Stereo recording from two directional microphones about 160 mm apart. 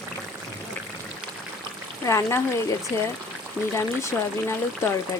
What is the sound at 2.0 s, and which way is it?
Speech, 20° left (ahead or behind).